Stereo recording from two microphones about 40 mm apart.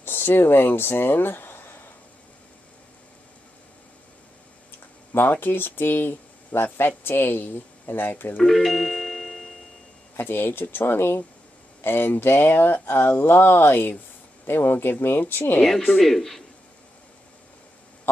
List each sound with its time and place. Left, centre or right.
0.0 s speech: left
4.6 s speech: left
8.5 s music: centre
10.1 s speech: left
11.8 s speech: left
16.0 s a man's voice: centre